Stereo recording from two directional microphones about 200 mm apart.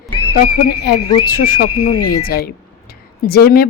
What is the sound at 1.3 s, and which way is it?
Speech, 45° left (ahead or behind).